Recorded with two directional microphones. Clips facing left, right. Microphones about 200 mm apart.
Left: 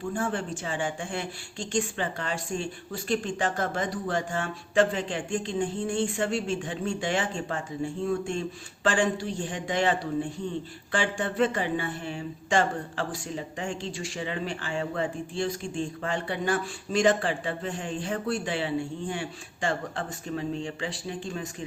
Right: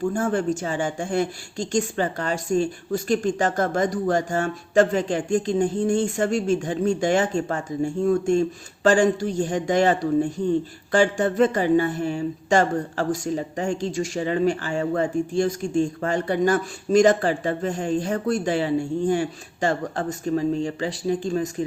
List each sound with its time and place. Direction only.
0.1 s speech: 45° right (ahead or behind)